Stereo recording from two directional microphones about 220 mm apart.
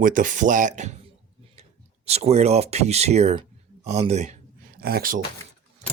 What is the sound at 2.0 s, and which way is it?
Speech, 30° right (ahead or behind).